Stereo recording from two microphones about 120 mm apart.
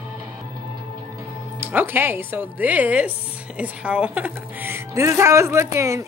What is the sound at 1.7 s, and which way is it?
Speech, 15° right (ahead or behind).